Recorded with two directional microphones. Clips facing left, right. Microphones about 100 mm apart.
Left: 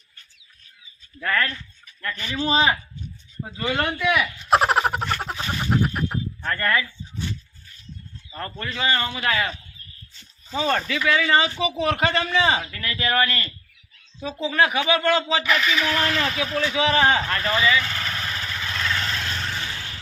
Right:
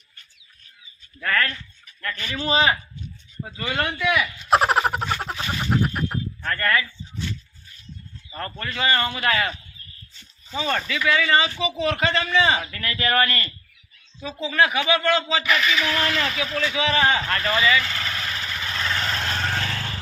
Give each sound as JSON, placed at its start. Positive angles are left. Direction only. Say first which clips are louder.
{"t": 1.2, "sound": "a man's voice", "louder": "even", "side_deg": 15}
{"t": 3.4, "sound": "speech", "louder": "left 2 dB", "side_deg": 25}
{"t": 3.9, "sound": "a sound", "louder": "left 1 dB", "side_deg": 5}
{"t": 6.4, "sound": "a sound", "louder": "even", "side_deg": 15}
{"t": 8.4, "sound": "a man's voice", "louder": "right 1 dB", "side_deg": 5}
{"t": 10.6, "sound": "a man's voice", "louder": "left 2 dB", "side_deg": 35}
{"t": 12.5, "sound": "a man's voice", "louder": "even", "side_deg": 10}
{"t": 14.5, "sound": "a man's voice", "louder": "even", "side_deg": 35}
{"t": 15.4, "sound": "a sound", "louder": "even", "side_deg": 0}
{"t": 15.9, "sound": "speech", "louder": "left 1 dB", "side_deg": 25}
{"t": 16.7, "sound": "a man's voice", "louder": "left 3 dB", "side_deg": 35}
{"t": 17.2, "sound": "vehicle", "louder": "even", "side_deg": 10}
{"t": 18.5, "sound": "vehicle", "louder": "even", "side_deg": -10}
{"t": 19.3, "sound": "vehicle", "louder": "right 4 dB", "side_deg": -60}